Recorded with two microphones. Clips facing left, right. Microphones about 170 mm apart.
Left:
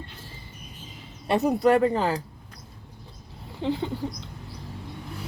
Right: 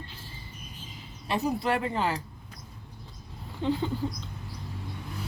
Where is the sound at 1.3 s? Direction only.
55° left (ahead or behind); by 2.2 s 40° left (ahead or behind).